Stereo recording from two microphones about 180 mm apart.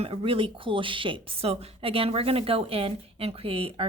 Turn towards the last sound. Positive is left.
turn(degrees=-30)  # may be behind; listen again after turning